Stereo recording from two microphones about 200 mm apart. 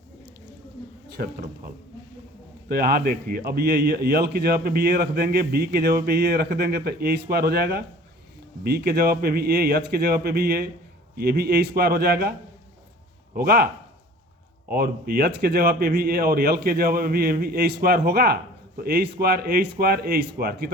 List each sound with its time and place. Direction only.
1.1 s speech: 50° right (ahead or behind)
2.6 s speech: 50° right (ahead or behind)
13.3 s speech: 50° right (ahead or behind)
14.7 s speech: 50° right (ahead or behind)